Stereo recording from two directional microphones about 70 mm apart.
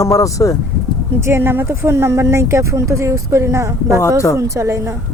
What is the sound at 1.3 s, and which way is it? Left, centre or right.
Speech, right.